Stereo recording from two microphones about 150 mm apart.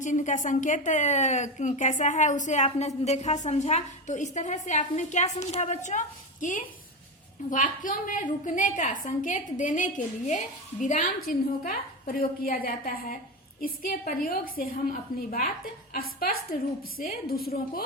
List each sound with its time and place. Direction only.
0.0 s a woman's voice: 55° left (ahead or behind); by 17.8 s 90° left